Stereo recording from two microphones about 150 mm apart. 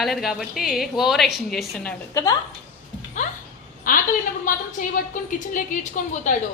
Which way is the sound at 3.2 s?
55° left (ahead or behind).